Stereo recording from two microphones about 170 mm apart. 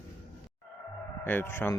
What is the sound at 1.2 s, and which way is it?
Speech, 10° left (ahead or behind).